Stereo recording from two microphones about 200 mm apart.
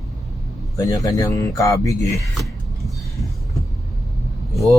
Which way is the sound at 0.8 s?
20° left (ahead or behind).